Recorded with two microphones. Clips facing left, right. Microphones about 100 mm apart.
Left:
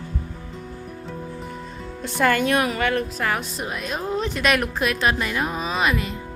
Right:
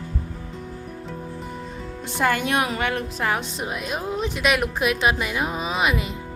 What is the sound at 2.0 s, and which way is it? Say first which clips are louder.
Speech: left 3 dB; 15° right (ahead or behind).